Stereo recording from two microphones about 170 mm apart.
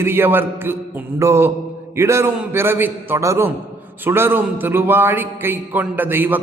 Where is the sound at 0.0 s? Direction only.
15° right (ahead or behind).